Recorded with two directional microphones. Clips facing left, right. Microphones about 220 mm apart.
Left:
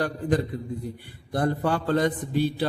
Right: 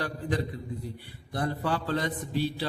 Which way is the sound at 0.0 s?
50° left (ahead or behind).